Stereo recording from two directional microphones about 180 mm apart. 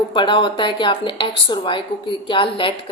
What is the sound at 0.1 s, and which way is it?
A woman's voice, 30° left (ahead or behind).